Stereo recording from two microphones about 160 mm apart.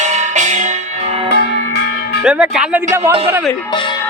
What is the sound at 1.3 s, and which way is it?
Church bell, 90° left.